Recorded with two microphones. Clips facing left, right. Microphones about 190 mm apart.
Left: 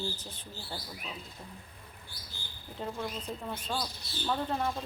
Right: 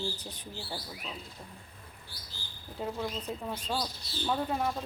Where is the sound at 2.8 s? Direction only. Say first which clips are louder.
Right 2 dB; 5° right (ahead or behind).